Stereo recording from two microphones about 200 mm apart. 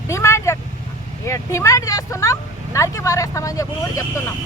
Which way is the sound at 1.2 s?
15° left (ahead or behind).